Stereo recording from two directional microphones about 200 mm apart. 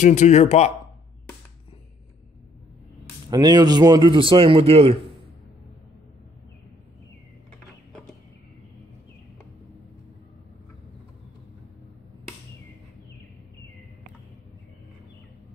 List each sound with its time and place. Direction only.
0.0 s speech: 35° left (ahead or behind)
3.3 s a man's voice: 20° right (ahead or behind)